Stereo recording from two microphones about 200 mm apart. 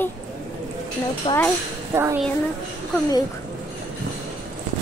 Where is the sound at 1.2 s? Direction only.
25° left (ahead or behind).